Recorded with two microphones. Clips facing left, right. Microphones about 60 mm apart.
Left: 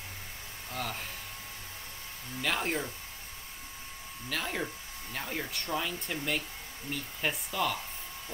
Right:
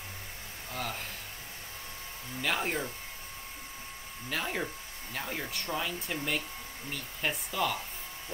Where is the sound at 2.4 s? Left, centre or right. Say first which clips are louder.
Even; centre.